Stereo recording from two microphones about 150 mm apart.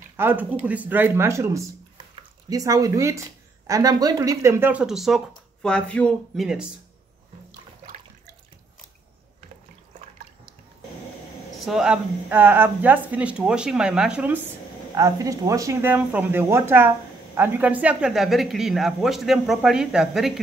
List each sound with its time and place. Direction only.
0.2 s speech: 10° right (ahead or behind)
11.6 s speech: 5° right (ahead or behind)
15.0 s speech: 20° right (ahead or behind); by 20.3 s 5° right (ahead or behind)